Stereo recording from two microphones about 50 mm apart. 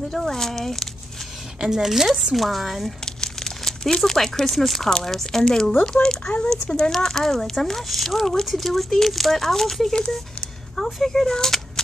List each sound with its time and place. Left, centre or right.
0.1 s speech: centre
1.6 s speech: centre
3.1 s speech: centre